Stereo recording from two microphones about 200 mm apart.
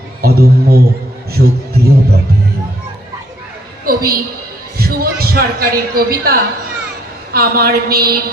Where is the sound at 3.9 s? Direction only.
45° right (ahead or behind).